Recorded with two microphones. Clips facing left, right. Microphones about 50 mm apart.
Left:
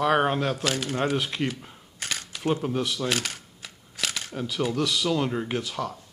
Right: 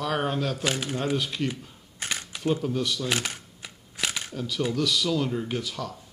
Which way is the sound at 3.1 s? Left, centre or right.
Centre.